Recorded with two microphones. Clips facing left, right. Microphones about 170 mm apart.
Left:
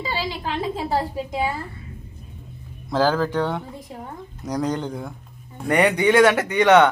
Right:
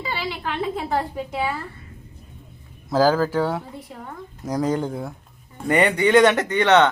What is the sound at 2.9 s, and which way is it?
Speech, 5° right (ahead or behind).